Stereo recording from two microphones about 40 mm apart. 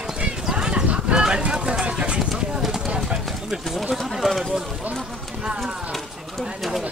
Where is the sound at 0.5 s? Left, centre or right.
Right.